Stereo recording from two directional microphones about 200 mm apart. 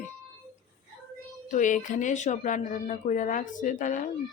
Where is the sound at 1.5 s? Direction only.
40° left (ahead or behind).